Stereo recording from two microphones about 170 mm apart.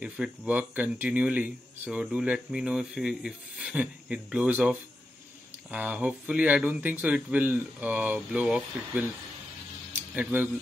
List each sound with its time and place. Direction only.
0.0 s speech: 5° right (ahead or behind)
10.1 s speech: 10° right (ahead or behind)